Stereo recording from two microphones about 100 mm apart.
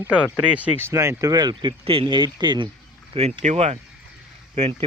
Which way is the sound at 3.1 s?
80° right.